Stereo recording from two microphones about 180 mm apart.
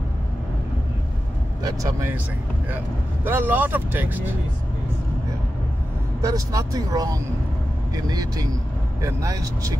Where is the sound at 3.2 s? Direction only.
10° right (ahead or behind).